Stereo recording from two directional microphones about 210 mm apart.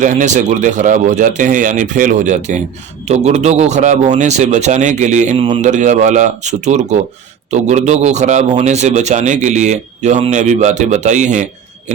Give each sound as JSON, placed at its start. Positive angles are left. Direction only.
{"t": 0.0, "sound": "a man's voice", "side_deg": -35}